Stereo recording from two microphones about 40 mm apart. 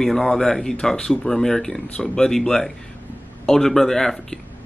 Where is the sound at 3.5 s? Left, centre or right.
Centre.